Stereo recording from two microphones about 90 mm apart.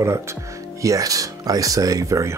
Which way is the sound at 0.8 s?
40° right (ahead or behind).